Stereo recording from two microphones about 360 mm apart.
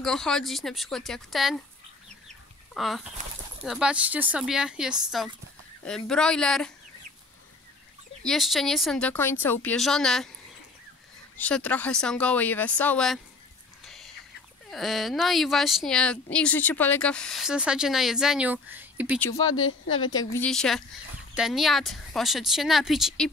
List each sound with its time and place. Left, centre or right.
0.0 s speech: centre
2.2 s chicken: centre
3.6 s speech: centre
8.2 s speech: centre
11.3 s speech: centre
13.8 s whispering: centre
14.7 s speech: centre
19.4 s speech: left
20.0 s speech: centre